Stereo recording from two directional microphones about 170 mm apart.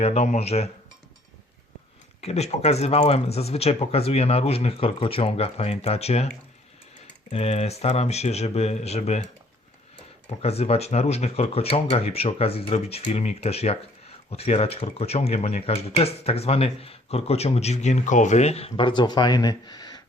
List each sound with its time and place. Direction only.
0.0 s speech: 40° left (ahead or behind)
2.2 s speech: 40° left (ahead or behind)
10.2 s speech: 35° left (ahead or behind)